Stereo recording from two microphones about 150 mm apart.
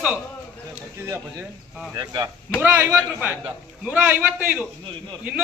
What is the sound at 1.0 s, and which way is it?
Speech, 15° right (ahead or behind).